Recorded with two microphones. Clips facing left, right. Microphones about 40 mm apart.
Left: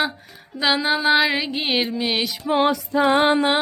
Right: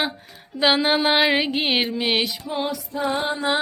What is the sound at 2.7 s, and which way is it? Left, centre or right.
Music, left.